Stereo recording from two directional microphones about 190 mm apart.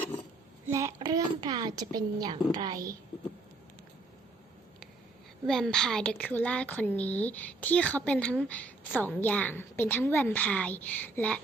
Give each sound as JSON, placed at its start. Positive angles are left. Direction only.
{"t": 0.7, "sound": "a woman's voice", "side_deg": -15}
{"t": 5.5, "sound": "a woman's voice", "side_deg": 0}